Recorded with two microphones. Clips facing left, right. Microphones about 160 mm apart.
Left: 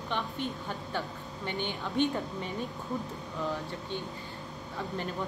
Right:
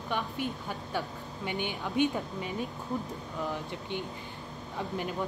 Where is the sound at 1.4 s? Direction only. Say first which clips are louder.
Right 1 dB; 10° right (ahead or behind).